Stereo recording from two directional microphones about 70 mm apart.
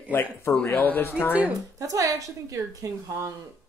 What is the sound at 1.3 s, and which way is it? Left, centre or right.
Speech, right.